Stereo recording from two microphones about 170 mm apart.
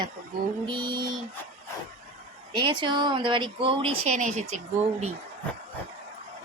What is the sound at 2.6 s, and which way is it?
Speech, 25° right (ahead or behind).